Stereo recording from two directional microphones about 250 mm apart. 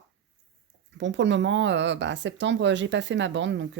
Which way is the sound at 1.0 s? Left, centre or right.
Right.